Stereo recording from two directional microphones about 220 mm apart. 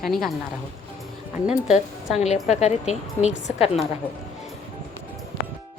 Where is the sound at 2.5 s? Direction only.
30° left (ahead or behind).